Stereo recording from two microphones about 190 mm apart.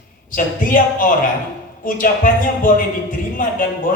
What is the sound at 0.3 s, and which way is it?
A man's voice, 45° left (ahead or behind).